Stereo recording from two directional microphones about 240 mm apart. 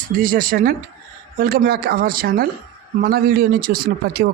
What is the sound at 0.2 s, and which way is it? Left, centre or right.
Speech, right.